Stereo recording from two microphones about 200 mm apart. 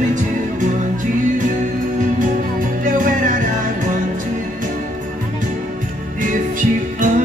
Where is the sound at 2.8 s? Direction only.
40° right (ahead or behind).